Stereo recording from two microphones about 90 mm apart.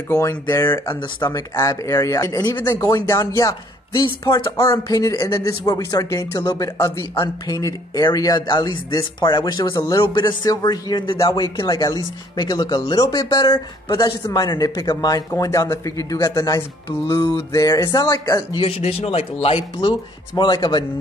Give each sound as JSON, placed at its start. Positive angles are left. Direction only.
{"t": 0.1, "sound": "speech", "side_deg": 30}
{"t": 0.8, "sound": "speech", "side_deg": 50}
{"t": 1.5, "sound": "speech", "side_deg": 40}
{"t": 2.6, "sound": "speech", "side_deg": 35}
{"t": 11.1, "sound": "speech", "side_deg": 40}
{"t": 18.6, "sound": "a man's voice", "side_deg": 90}